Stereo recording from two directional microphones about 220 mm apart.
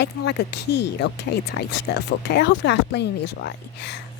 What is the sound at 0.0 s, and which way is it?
Speech, 50° left (ahead or behind).